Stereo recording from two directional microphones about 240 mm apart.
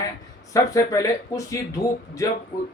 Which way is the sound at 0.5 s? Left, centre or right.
Centre.